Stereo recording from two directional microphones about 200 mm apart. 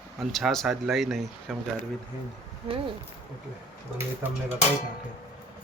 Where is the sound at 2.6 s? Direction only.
25° right (ahead or behind).